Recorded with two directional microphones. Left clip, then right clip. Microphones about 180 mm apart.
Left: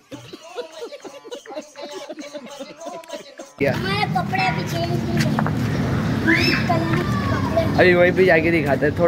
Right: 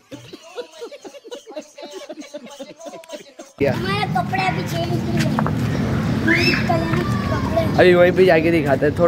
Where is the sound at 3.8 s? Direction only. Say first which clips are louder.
Right 1 dB; 60° right (ahead or behind).